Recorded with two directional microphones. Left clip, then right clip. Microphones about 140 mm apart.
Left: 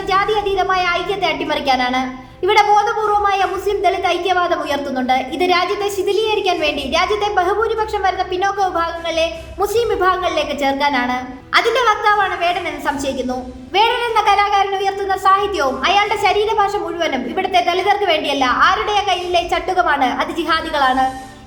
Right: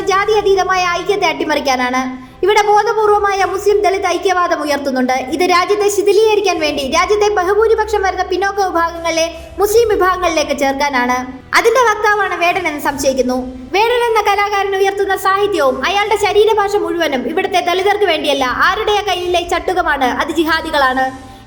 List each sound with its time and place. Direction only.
0.1 s a woman's voice: 40° right (ahead or behind)
13.7 s a woman's voice: 40° right (ahead or behind)